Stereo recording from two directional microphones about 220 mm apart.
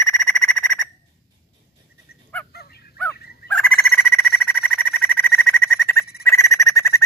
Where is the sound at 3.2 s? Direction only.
45° left (ahead or behind).